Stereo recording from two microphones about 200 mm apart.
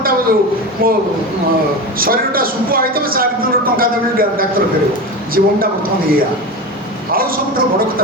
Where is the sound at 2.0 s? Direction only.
45° right (ahead or behind).